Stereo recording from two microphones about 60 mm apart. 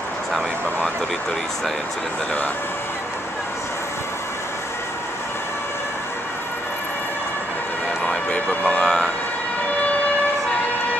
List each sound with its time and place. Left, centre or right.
8.1 s vehicle: centre